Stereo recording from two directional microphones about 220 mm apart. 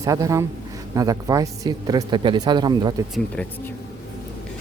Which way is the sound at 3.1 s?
5° left (ahead or behind).